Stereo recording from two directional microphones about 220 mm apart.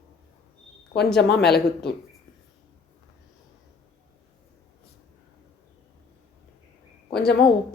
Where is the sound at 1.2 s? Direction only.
50° left (ahead or behind).